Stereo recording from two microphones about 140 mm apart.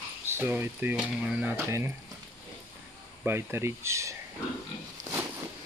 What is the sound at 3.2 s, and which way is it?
Speech, 15° right (ahead or behind).